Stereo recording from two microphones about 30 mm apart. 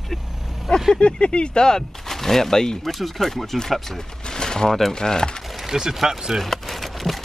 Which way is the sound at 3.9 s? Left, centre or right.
Left.